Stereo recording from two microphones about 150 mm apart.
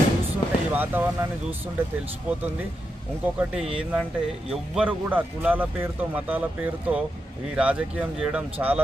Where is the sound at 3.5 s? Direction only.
5° right (ahead or behind).